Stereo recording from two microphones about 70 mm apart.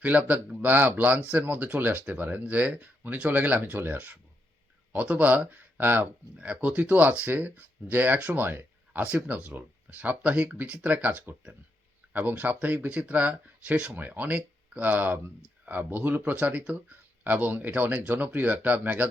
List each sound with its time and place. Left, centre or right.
0.0 s speech: right